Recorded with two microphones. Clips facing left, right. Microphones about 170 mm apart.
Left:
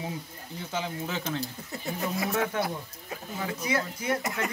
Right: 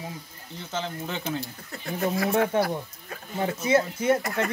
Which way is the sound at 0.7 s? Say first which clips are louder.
Right 1 dB; 10° left (ahead or behind).